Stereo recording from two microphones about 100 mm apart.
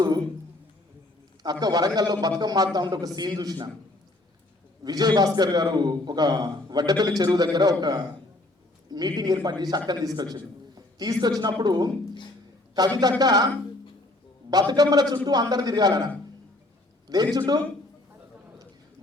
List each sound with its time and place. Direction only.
1.4 s a man's voice: 45° right (ahead or behind)
4.8 s a man's voice: 40° right (ahead or behind)
14.5 s a man's voice: 40° right (ahead or behind)
17.3 s a man's voice: 40° right (ahead or behind)